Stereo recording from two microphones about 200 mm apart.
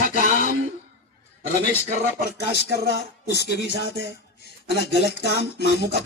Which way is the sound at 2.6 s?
55° right (ahead or behind).